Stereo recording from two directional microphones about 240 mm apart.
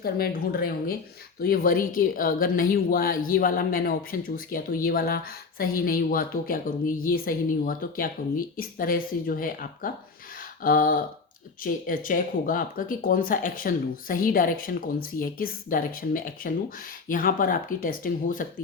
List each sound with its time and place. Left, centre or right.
0.0 s speech: left